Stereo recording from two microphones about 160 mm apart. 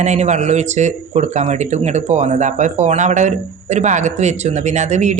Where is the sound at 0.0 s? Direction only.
45° right (ahead or behind).